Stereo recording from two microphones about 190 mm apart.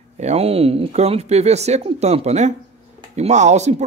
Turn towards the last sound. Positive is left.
turn(degrees=-35)  # may be behind; listen again after turning